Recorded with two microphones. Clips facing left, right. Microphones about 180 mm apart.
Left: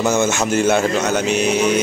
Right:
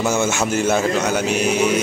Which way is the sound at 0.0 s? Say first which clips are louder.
Left 2 dB; 10° right (ahead or behind).